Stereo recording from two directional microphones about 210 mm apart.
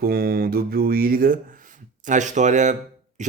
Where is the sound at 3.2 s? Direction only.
35° right (ahead or behind).